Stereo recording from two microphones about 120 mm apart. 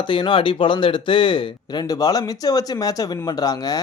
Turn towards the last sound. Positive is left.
turn(degrees=30)  # may be behind; listen again after turning